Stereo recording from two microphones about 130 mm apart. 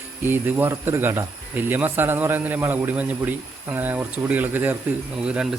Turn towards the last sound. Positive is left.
turn(degrees=-5)  # may be behind; listen again after turning